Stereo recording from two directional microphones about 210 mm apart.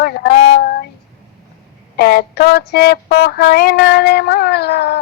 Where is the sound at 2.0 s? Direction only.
50° left (ahead or behind).